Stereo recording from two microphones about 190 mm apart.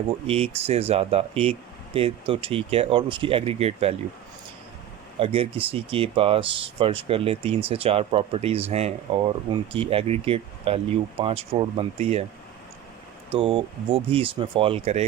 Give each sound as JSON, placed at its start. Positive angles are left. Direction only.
{"t": 0.3, "sound": "speech", "side_deg": -30}
{"t": 5.2, "sound": "speech", "side_deg": -30}
{"t": 13.3, "sound": "speech", "side_deg": -30}